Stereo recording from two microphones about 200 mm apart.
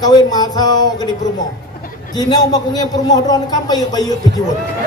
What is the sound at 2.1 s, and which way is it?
A man's voice, 20° left (ahead or behind).